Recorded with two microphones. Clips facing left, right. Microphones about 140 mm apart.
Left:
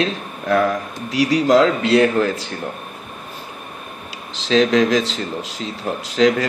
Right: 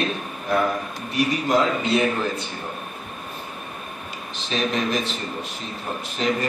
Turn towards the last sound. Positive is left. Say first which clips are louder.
# left 8 dB
turn(degrees=90)